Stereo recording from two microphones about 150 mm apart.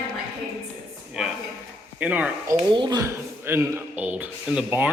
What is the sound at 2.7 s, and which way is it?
Speech, 30° right (ahead or behind).